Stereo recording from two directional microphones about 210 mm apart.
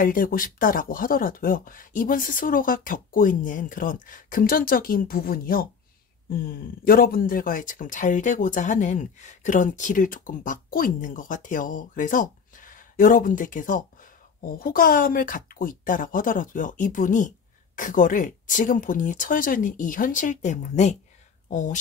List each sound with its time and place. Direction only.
0.0 s speech: 40° left (ahead or behind)